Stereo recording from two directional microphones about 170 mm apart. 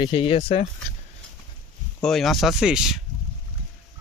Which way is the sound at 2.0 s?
Centre (ahead or behind).